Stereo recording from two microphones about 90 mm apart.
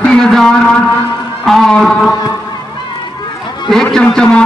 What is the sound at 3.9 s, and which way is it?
Speech, 10° left (ahead or behind).